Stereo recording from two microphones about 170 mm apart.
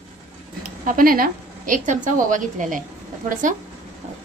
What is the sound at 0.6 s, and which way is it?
A woman's voice, 55° right (ahead or behind).